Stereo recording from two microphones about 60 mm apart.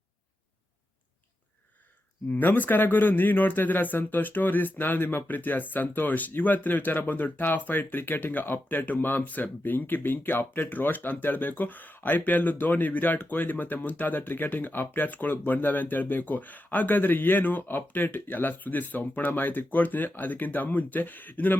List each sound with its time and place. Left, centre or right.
2.3 s speech: left